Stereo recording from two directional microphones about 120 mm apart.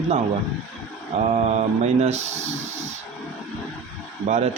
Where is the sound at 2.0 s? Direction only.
70° right (ahead or behind).